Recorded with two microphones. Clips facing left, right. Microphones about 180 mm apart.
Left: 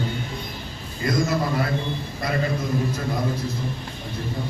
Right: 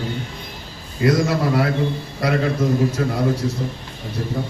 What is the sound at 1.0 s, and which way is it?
A man's voice, 75° right (ahead or behind).